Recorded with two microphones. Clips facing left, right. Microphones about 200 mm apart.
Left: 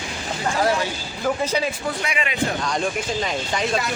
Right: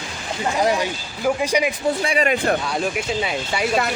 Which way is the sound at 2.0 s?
35° right (ahead or behind).